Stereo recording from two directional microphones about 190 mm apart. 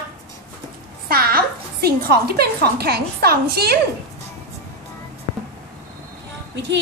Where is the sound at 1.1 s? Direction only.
55° right (ahead or behind).